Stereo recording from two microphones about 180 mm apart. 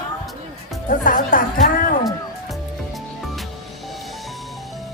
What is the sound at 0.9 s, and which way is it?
Speech, 50° left (ahead or behind).